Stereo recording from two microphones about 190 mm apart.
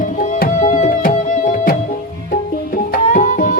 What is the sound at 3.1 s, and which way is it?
Music, 40° left (ahead or behind).